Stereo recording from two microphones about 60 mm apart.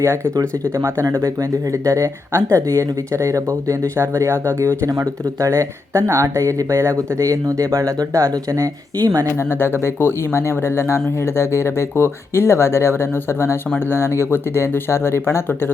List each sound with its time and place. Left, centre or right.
1.0 s speech: right
3.9 s speech: right
4.9 s speech: right
5.5 s speech: right
6.9 s speech: right
9.4 s speech: left